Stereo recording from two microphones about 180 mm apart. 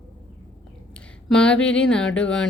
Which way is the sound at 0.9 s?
5° left (ahead or behind).